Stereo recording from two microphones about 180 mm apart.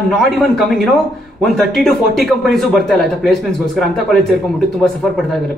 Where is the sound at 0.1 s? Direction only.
Centre (ahead or behind).